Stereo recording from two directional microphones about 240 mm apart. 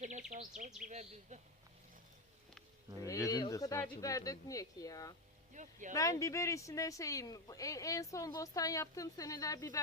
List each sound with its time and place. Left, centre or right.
0.0 s insect: right
0.8 s speech: right
3.1 s speech: centre
5.6 s speech: right
5.9 s speech: centre